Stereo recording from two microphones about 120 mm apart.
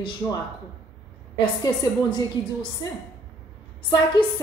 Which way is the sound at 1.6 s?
35° left (ahead or behind).